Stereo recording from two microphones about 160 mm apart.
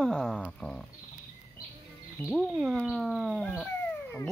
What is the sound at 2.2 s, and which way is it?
Speech, centre (ahead or behind).